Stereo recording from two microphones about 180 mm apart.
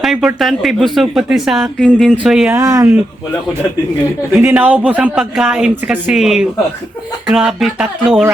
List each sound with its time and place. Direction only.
0.0 s speech: centre (ahead or behind)
2.6 s a woman's voice: 15° right (ahead or behind)
4.4 s a woman's voice: 10° right (ahead or behind)